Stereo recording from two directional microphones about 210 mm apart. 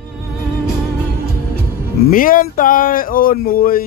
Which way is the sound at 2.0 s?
40° left (ahead or behind).